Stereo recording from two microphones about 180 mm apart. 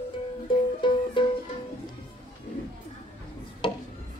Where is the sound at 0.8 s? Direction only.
25° left (ahead or behind).